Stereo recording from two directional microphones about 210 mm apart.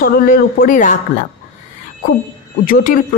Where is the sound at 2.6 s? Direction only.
40° left (ahead or behind).